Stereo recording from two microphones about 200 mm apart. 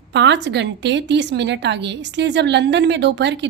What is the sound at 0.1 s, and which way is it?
A woman's voice, 60° right (ahead or behind).